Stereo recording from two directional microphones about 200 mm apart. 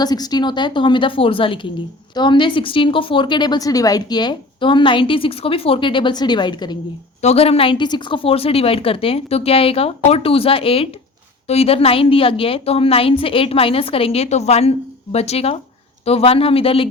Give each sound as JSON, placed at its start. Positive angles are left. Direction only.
{"t": 0.0, "sound": "a woman's voice", "side_deg": 20}